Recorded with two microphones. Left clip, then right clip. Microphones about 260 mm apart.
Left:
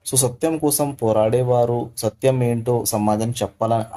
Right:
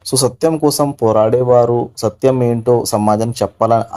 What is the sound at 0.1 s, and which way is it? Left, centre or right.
Speech, right.